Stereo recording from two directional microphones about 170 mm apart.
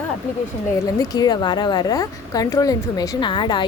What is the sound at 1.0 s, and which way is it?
Speech, 25° left (ahead or behind).